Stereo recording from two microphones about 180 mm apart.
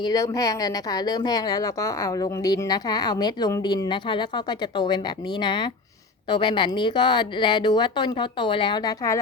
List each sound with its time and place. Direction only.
0.0 s speech: 20° left (ahead or behind)